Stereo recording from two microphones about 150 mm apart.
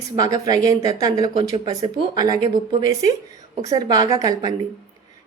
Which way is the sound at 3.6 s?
25° right (ahead or behind).